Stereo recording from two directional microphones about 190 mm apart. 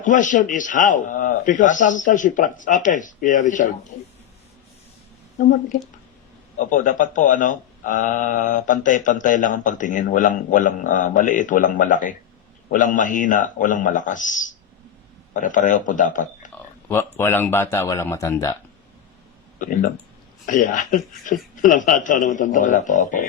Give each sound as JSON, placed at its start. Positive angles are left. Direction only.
{"t": 0.0, "sound": "speech", "side_deg": 40}
{"t": 6.6, "sound": "speech", "side_deg": 40}
{"t": 16.9, "sound": "speech", "side_deg": 10}
{"t": 19.5, "sound": "speech", "side_deg": 45}